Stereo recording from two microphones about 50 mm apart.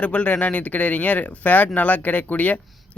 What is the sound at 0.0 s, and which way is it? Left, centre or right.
Speech, left.